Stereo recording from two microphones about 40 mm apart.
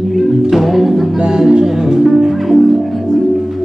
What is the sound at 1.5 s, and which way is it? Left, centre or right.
Music, centre.